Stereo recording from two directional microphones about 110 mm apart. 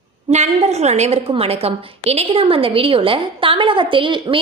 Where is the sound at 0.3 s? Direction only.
85° right.